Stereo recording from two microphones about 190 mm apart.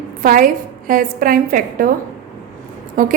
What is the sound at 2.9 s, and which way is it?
Speech, 45° right (ahead or behind).